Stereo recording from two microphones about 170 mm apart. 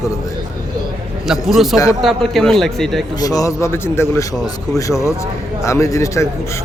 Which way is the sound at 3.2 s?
20° left (ahead or behind).